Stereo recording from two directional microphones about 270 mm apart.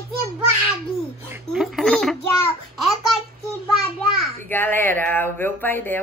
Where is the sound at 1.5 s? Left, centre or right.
Centre.